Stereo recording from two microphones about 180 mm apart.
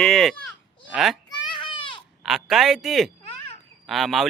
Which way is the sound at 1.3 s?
25° left (ahead or behind).